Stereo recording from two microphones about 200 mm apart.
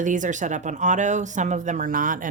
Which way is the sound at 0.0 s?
40° right (ahead or behind).